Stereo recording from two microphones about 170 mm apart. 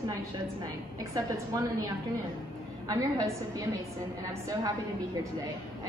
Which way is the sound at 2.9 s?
20° right (ahead or behind).